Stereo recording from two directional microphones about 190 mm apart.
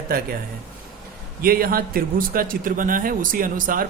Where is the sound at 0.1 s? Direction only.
50° right (ahead or behind).